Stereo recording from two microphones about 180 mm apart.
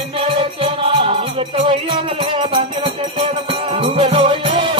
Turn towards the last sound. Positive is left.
turn(degrees=-30)  # may be behind; listen again after turning